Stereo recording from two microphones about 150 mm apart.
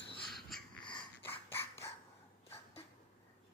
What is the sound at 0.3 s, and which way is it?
Crow, centre (ahead or behind).